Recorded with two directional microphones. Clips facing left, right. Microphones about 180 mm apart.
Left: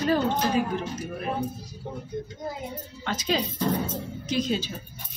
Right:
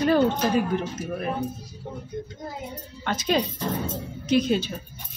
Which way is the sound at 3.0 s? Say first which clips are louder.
Right 3 dB; 55° right (ahead or behind).